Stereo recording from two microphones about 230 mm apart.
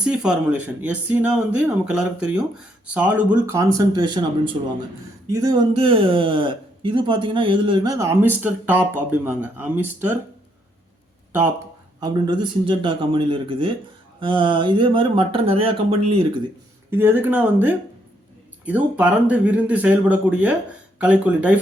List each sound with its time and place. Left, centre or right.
0.0 s speech: centre
11.3 s speech: centre
16.9 s speech: centre